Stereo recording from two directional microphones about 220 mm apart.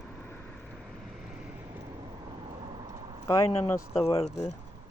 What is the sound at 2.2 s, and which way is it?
Vehicle, 20° right (ahead or behind).